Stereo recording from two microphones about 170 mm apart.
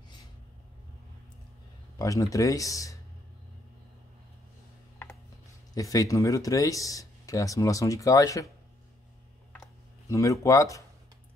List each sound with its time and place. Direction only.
2.0 s speech: 20° left (ahead or behind)
5.8 s speech: 20° left (ahead or behind)
9.5 s a sound: 20° left (ahead or behind)